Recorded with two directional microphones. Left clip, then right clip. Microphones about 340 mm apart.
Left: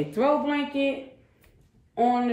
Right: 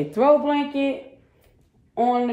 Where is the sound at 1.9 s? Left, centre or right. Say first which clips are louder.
Right 2 dB; centre.